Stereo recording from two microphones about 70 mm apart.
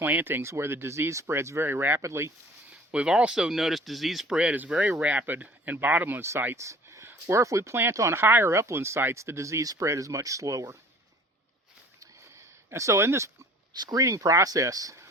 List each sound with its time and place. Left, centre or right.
0.0 s speech: right
0.4 s speech: right
2.0 s speech: right
2.9 s speech: centre
4.4 s speech: centre
6.6 s a sound: right
7.1 s speech: right
11.9 s a sound: right
13.7 s speech: right